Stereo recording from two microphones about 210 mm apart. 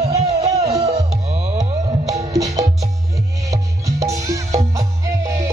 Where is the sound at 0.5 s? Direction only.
30° right (ahead or behind).